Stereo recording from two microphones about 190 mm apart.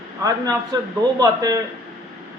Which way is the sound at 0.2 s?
20° right (ahead or behind).